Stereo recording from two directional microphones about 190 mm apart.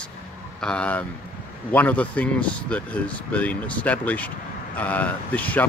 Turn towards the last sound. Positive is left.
turn(degrees=10)  # may be behind; listen again after turning